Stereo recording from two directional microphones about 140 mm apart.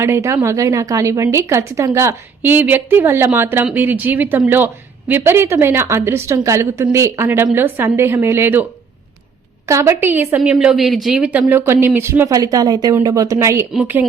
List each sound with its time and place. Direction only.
0.0 s speech: 20° right (ahead or behind)
9.6 s speech: 20° right (ahead or behind)